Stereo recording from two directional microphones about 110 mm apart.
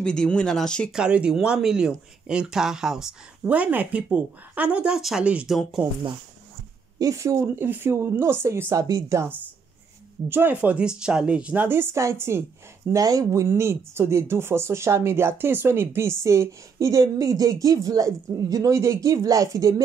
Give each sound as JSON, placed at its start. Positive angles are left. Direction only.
{"t": 0.0, "sound": "speech", "side_deg": 10}
{"t": 0.9, "sound": "speech", "side_deg": -10}
{"t": 7.0, "sound": "speech", "side_deg": -30}